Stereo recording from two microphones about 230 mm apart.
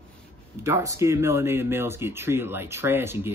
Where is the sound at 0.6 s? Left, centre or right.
Centre.